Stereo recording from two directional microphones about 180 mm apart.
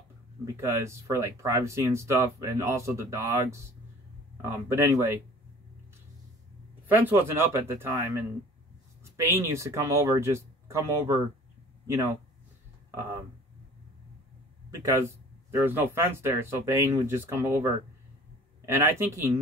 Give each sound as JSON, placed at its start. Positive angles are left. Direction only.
{"t": 0.6, "sound": "speech", "side_deg": -15}
{"t": 6.9, "sound": "speech", "side_deg": -10}
{"t": 14.7, "sound": "speech", "side_deg": -15}